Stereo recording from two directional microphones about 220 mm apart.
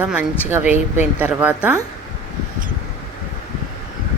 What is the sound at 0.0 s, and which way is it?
A woman's voice, 5° right (ahead or behind).